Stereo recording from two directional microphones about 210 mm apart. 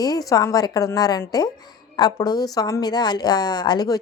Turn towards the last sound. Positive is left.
turn(degrees=20)  # may be behind; listen again after turning